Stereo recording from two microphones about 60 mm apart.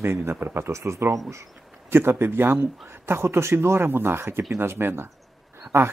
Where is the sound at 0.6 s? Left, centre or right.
Right.